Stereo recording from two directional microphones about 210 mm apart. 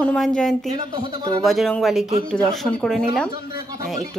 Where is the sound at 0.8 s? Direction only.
20° right (ahead or behind).